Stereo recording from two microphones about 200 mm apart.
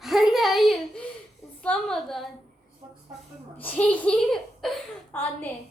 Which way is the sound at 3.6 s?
10° left (ahead or behind).